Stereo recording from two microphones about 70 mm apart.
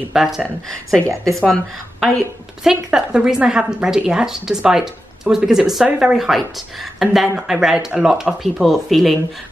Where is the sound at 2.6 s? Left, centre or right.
Centre.